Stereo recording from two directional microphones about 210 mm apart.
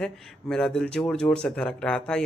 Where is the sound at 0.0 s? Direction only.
5° left (ahead or behind).